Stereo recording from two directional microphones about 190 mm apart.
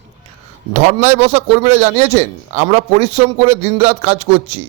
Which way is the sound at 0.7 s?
35° right (ahead or behind).